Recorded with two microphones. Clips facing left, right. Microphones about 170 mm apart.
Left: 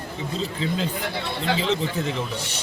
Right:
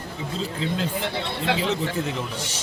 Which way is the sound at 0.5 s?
Centre (ahead or behind).